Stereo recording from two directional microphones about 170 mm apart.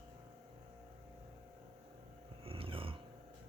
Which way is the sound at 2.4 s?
35° right (ahead or behind).